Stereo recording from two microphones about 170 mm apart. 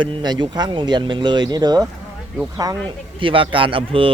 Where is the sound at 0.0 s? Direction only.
25° right (ahead or behind).